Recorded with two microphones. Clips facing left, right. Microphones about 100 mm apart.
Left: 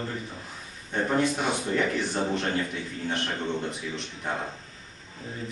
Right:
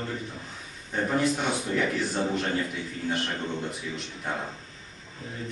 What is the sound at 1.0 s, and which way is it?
A man's voice, 5° left (ahead or behind).